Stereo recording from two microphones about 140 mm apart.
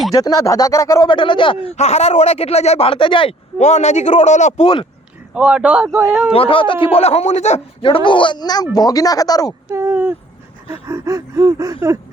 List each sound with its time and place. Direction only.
0.1 s speech: 25° left (ahead or behind)
1.1 s speech: 35° left (ahead or behind)
1.7 s speech: 50° left (ahead or behind)
3.6 s a man's voice: 55° left (ahead or behind)
5.3 s speech: 5° right (ahead or behind)
5.9 s speech: 20° right (ahead or behind)
6.3 s speech: 40° left (ahead or behind)
7.9 s speech: 35° left (ahead or behind)
9.6 s speech: 20° right (ahead or behind)
10.7 s gasp: 20° right (ahead or behind)